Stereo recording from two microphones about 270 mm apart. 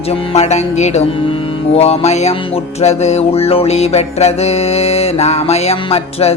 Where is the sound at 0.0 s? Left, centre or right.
Left.